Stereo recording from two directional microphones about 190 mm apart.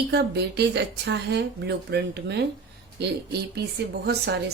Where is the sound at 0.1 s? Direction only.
60° right (ahead or behind).